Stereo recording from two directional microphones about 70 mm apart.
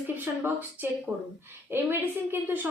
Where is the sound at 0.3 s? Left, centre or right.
Right.